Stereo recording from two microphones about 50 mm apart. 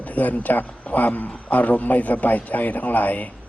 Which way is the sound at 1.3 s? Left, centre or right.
Centre.